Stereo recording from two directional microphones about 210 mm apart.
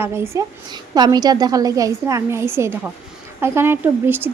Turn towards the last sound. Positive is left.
turn(degrees=-10)  # may be behind; listen again after turning